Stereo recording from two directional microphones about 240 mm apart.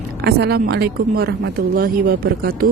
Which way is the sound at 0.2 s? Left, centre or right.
Right.